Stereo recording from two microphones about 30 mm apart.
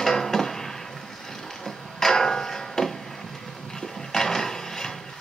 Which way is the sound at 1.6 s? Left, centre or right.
Centre.